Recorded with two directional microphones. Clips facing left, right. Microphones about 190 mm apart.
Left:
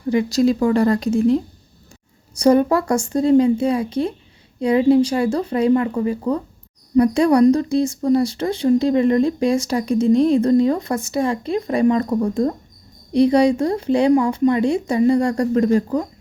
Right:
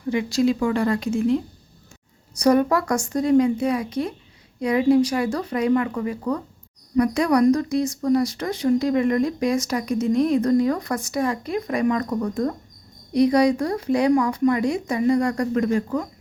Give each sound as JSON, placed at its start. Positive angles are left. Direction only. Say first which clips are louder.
{"t": 0.1, "sound": "speech", "louder": "left 4 dB", "side_deg": 40}